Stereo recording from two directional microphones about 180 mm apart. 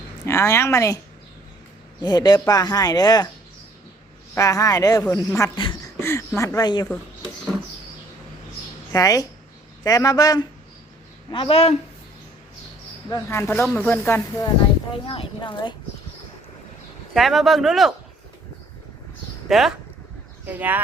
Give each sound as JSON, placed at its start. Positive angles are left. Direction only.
{"t": 0.3, "sound": "a woman's voice", "side_deg": 15}
{"t": 2.0, "sound": "speech", "side_deg": 25}
{"t": 4.4, "sound": "a woman's voice", "side_deg": 15}
{"t": 8.9, "sound": "speech", "side_deg": 20}
{"t": 13.1, "sound": "a woman's voice", "side_deg": 15}
{"t": 14.9, "sound": "speech", "side_deg": 30}
{"t": 17.2, "sound": "speech", "side_deg": 0}
{"t": 19.5, "sound": "speech", "side_deg": 0}